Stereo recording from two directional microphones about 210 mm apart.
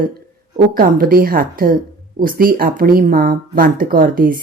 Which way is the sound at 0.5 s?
45° right (ahead or behind).